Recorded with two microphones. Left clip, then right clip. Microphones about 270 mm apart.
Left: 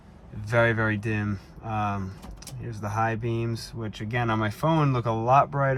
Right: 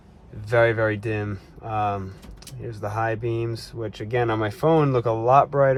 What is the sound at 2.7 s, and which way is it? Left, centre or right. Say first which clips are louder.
Speech: right 2 dB; centre.